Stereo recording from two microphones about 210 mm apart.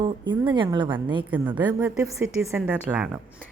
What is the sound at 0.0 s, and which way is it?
Speech, 20° right (ahead or behind).